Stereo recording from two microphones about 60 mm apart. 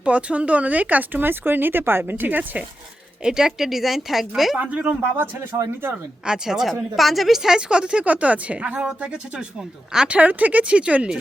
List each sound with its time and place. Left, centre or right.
0.0 s speech: centre
3.2 s speech: centre
4.5 s speech: right
4.9 s speech: right
6.2 s a woman's voice: centre
10.2 s speech: right